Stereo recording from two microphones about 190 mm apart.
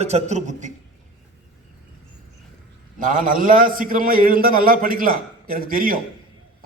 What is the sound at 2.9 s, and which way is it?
A man's voice, 45° right (ahead or behind).